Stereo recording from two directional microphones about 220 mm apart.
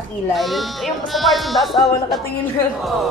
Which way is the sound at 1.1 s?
Centre (ahead or behind).